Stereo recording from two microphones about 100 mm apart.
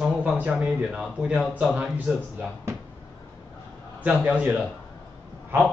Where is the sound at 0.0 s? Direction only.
15° right (ahead or behind).